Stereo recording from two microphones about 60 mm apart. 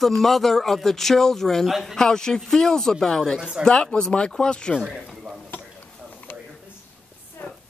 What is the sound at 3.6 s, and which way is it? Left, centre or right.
A man's voice, centre.